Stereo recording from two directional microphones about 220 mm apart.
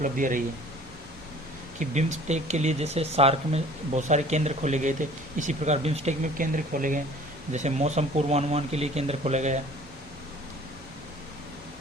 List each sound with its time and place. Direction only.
0.0 s speech: 35° right (ahead or behind)
1.8 s speech: 35° right (ahead or behind)